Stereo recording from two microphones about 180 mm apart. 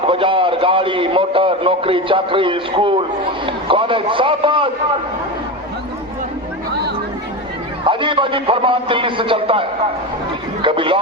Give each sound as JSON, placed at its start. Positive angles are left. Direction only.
{"t": 0.1, "sound": "a man's voice", "side_deg": -30}
{"t": 7.9, "sound": "a man's voice", "side_deg": -30}